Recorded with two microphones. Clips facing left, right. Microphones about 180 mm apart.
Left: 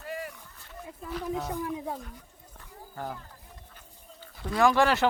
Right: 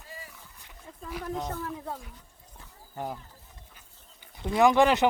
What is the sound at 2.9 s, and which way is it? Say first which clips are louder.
Speech: right 2 dB; 15° right (ahead or behind).